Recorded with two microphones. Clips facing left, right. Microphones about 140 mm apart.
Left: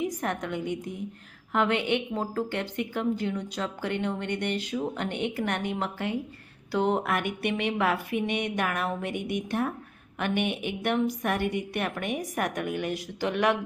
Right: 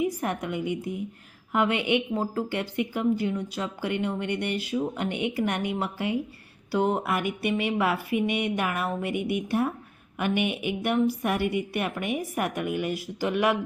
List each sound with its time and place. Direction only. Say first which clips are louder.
0.0 s a woman's voice: right 2 dB; 10° right (ahead or behind)